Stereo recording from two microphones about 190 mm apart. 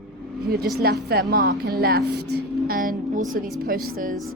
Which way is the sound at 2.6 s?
50° right (ahead or behind).